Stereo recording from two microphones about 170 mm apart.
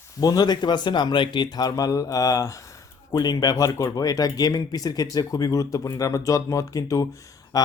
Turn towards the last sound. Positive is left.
turn(degrees=20)  # may be behind; listen again after turning